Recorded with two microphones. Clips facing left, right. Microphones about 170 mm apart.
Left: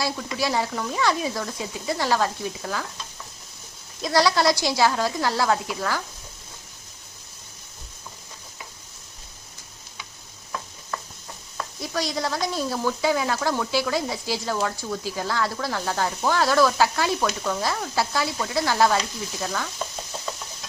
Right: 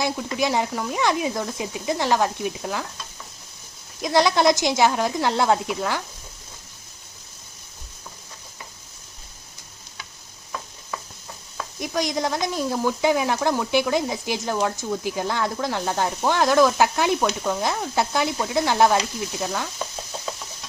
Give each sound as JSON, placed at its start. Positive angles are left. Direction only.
{"t": 0.3, "sound": "speech", "side_deg": -20}
{"t": 4.0, "sound": "speech", "side_deg": -20}
{"t": 11.8, "sound": "speech", "side_deg": -20}